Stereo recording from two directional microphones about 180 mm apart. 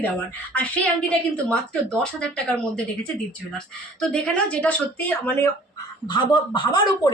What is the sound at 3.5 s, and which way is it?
Speech, 5° left (ahead or behind).